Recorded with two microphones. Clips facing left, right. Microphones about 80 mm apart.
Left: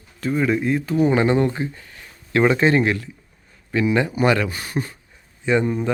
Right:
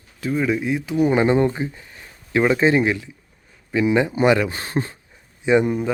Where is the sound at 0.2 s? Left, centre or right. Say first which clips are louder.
Left 1 dB; centre; by 4.9 s right.